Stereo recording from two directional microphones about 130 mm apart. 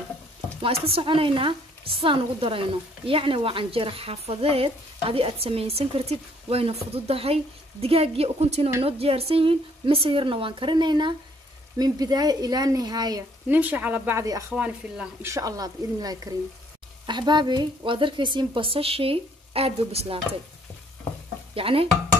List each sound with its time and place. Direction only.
0.6 s a woman's voice: 50° right (ahead or behind); by 13.2 s 30° right (ahead or behind)
13.5 s a woman's voice: 10° right (ahead or behind)
14.5 s speech: 5° right (ahead or behind)
15.2 s a woman's voice: 25° right (ahead or behind); by 20.2 s 50° right (ahead or behind)
21.5 s speech: 45° right (ahead or behind)